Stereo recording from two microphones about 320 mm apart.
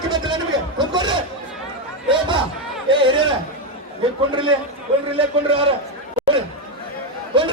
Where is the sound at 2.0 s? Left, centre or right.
Centre.